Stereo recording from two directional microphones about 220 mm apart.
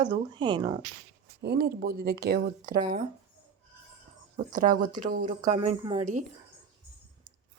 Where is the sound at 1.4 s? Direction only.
45° right (ahead or behind).